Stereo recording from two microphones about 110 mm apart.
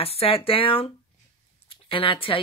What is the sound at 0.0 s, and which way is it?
Speech, 60° left (ahead or behind).